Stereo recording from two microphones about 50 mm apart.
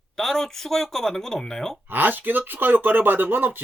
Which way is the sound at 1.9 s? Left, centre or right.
Right.